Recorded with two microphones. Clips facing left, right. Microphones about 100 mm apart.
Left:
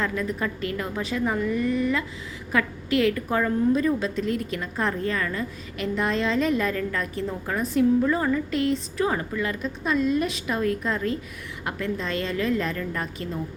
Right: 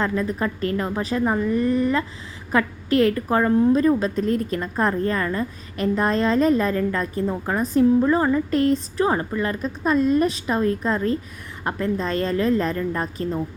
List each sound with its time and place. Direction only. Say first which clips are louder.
0.0 s a woman's voice: right 4 dB; 35° right (ahead or behind)